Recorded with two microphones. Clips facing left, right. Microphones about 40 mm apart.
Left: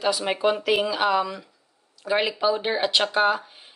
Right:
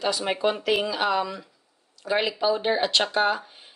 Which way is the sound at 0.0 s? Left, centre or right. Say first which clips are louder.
Left 2 dB; centre.